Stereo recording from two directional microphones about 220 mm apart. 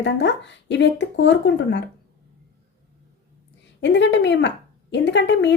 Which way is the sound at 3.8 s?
55° left (ahead or behind).